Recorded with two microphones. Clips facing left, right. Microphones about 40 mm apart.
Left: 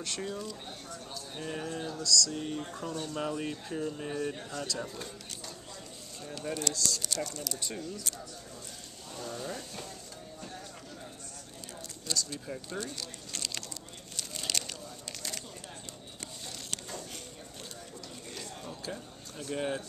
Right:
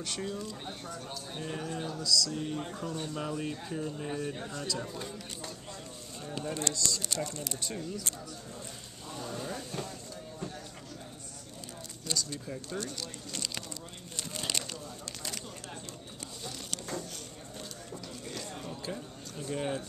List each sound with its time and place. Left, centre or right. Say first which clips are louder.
0.0 s speech: even; centre
0.5 s speech: right 2 dB; centre
2.3 s speech: right 1 dB; centre
6.5 s speech: left 1 dB; right
7.5 s speech: right 1 dB; centre
9.1 s a sound: even; centre
12.1 s speech: even; centre
12.4 s speech: even; centre
13.3 s a sound: even; centre
14.1 s a sound: even; centre
18.6 s a sound: left 1 dB; centre
19.5 s speech: left 1 dB; centre